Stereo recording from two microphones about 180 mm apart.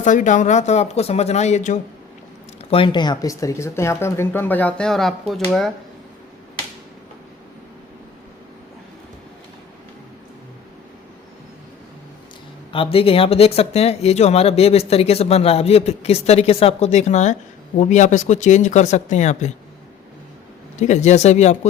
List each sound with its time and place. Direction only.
0.0 s speech: 45° left (ahead or behind)
2.6 s speech: 30° left (ahead or behind); by 5.7 s centre (ahead or behind)
12.7 s speech: 30° left (ahead or behind)
20.7 s speech: 40° left (ahead or behind)